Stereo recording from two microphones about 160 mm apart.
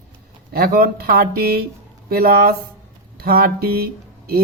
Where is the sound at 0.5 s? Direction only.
70° right (ahead or behind).